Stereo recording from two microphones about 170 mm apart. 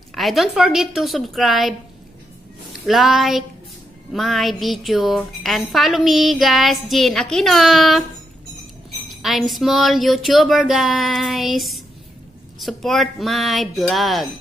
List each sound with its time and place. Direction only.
0.1 s a woman's voice: centre (ahead or behind)
2.9 s a woman's voice: centre (ahead or behind)
9.1 s a woman's voice: centre (ahead or behind)